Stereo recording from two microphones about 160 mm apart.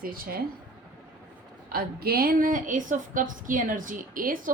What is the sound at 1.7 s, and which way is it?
A woman's voice, 70° right (ahead or behind).